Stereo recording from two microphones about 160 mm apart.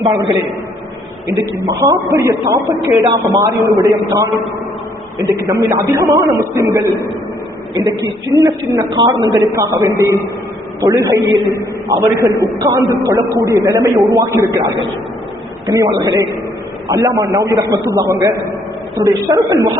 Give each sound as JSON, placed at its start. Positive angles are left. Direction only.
{"t": 0.0, "sound": "a man's voice", "side_deg": -30}
{"t": 1.4, "sound": "a man's voice", "side_deg": -20}
{"t": 15.7, "sound": "a man's voice", "side_deg": -20}